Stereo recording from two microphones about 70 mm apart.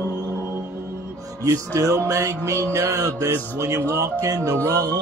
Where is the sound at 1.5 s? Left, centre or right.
Right.